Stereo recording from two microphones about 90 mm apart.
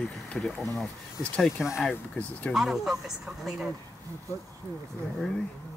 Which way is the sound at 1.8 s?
10° left (ahead or behind).